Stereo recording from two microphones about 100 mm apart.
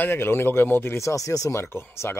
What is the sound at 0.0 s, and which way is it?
Speech, 20° left (ahead or behind).